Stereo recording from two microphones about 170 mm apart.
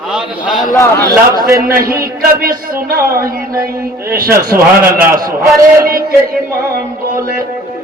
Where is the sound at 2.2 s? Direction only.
60° right (ahead or behind).